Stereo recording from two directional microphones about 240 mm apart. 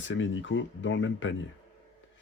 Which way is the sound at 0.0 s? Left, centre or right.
Left.